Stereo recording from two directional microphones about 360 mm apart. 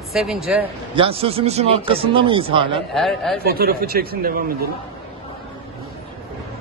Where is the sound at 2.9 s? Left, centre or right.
Centre.